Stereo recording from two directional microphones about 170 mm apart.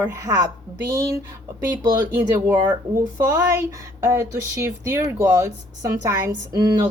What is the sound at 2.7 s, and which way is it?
A woman's voice, 20° right (ahead or behind).